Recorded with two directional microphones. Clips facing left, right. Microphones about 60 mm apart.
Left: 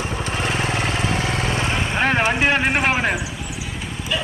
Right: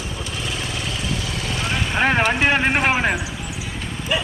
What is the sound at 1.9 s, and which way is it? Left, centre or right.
Vehicle, centre.